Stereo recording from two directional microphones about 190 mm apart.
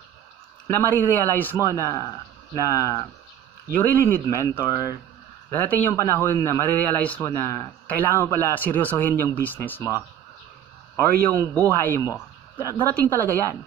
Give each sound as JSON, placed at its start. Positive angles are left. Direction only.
{"t": 0.7, "sound": "a man's voice", "side_deg": 10}
{"t": 11.5, "sound": "speech", "side_deg": 10}
{"t": 12.8, "sound": "a man's voice", "side_deg": 10}